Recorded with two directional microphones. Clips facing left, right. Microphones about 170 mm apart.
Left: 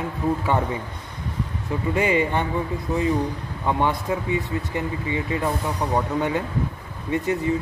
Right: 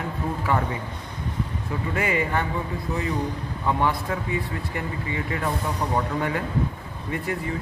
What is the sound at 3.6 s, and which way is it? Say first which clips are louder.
Speech: left 2 dB; 20° left (ahead or behind).